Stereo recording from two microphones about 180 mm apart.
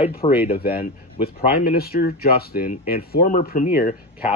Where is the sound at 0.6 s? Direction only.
55° left (ahead or behind).